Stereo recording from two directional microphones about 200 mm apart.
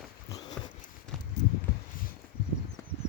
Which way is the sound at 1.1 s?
5° left (ahead or behind).